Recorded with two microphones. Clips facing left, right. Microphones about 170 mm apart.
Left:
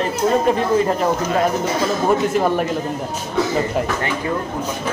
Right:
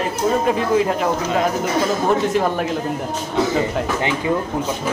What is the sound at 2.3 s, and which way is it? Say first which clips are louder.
Speech: left 1 dB; centre (ahead or behind).